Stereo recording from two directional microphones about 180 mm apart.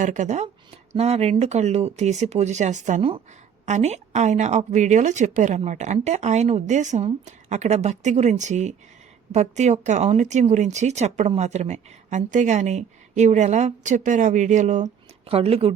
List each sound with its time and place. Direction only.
0.0 s speech: 45° right (ahead or behind)